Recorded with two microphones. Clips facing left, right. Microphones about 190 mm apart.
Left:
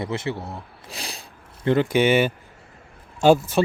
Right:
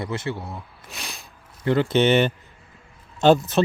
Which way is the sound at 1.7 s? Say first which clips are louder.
Even; 15° left (ahead or behind).